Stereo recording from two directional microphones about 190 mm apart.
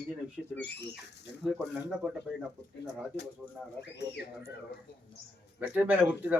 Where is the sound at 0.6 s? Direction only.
65° left (ahead or behind).